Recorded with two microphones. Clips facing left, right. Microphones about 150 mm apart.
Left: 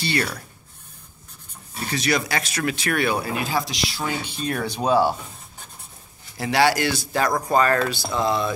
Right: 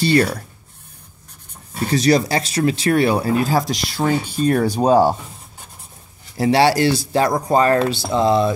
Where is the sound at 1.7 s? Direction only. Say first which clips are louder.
Right 8 dB; 40° right (ahead or behind).